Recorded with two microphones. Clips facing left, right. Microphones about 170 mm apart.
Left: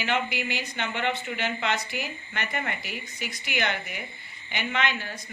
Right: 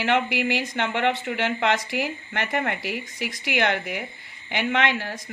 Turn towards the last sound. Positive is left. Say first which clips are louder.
# right 5 dB
turn(degrees=-90)